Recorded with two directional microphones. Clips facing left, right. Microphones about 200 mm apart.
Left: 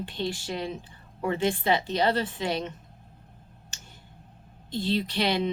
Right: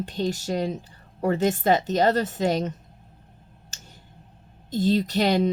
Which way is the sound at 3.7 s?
40° right (ahead or behind).